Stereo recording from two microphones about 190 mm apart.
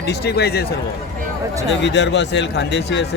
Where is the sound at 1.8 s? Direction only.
65° left (ahead or behind).